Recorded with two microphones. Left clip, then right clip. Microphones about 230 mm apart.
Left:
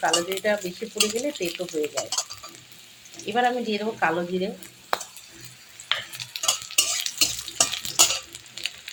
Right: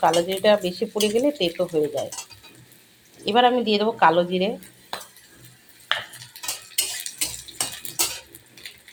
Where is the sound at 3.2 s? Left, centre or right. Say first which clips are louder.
Right 5 dB; right.